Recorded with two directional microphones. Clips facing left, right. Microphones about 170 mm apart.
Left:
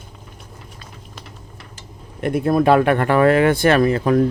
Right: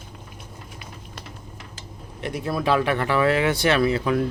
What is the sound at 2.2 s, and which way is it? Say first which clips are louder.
Speech: left 9 dB; 55° left (ahead or behind).